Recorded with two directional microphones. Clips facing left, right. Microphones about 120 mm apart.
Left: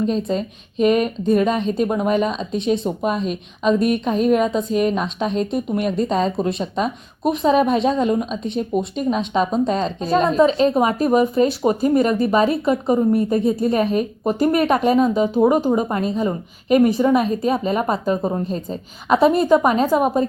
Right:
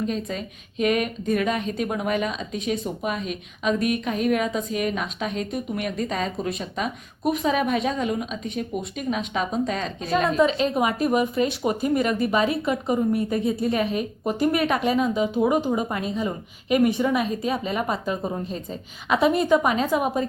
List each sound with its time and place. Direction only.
0.1 s a woman's voice: 25° left (ahead or behind)